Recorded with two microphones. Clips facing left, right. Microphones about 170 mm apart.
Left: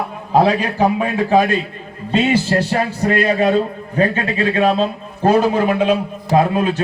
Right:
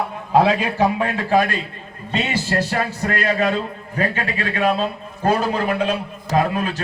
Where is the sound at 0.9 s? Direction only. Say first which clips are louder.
Left 3 dB; 15° left (ahead or behind).